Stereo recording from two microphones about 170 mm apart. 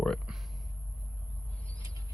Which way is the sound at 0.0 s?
Centre (ahead or behind).